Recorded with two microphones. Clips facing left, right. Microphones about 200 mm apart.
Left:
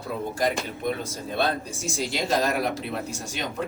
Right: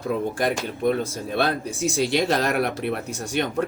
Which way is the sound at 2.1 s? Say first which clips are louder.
Even; 65° right (ahead or behind).